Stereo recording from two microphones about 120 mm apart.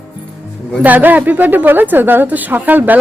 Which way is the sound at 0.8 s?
15° right (ahead or behind).